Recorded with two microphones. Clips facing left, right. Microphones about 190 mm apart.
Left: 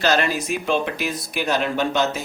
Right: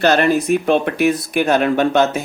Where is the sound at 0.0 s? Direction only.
55° right (ahead or behind).